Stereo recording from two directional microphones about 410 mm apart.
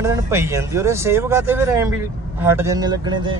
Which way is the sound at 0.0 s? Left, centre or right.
Centre.